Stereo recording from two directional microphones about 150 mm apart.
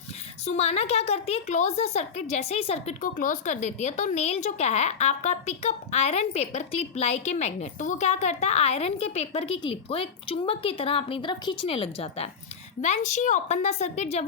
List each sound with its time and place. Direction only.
0.4 s a woman's voice: 45° left (ahead or behind)
12.8 s a woman's voice: 55° left (ahead or behind)